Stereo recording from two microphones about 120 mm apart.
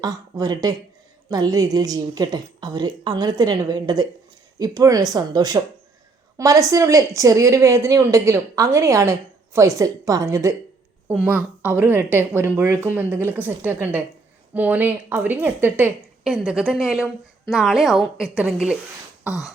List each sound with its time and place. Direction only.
0.0 s a woman's voice: 30° right (ahead or behind)
11.3 s a woman's voice: 15° right (ahead or behind)
16.2 s a woman's voice: 5° right (ahead or behind)